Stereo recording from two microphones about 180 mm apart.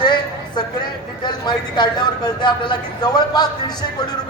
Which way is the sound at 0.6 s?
25° left (ahead or behind).